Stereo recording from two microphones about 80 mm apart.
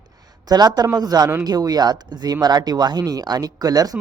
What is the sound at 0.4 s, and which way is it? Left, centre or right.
A man's voice, right.